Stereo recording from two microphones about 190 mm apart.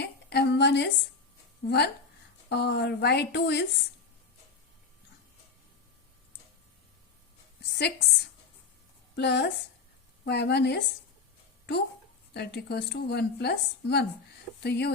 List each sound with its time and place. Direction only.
0.0 s a sound: 60° left (ahead or behind)
1.6 s a woman's voice: 60° left (ahead or behind)
7.7 s a woman's voice: 60° left (ahead or behind)
12.3 s a woman's voice: 60° left (ahead or behind)